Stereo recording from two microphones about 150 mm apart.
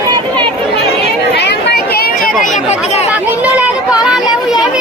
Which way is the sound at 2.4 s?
50° left (ahead or behind).